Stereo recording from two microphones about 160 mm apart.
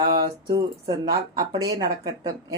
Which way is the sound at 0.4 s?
25° right (ahead or behind).